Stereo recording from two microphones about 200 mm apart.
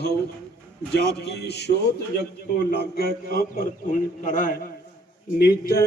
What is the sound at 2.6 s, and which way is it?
Mantra, 50° left (ahead or behind).